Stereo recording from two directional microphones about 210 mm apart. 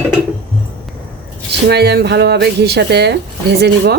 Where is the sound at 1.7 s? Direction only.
50° right (ahead or behind).